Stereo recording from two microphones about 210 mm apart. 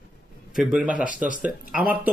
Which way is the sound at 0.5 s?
5° right (ahead or behind).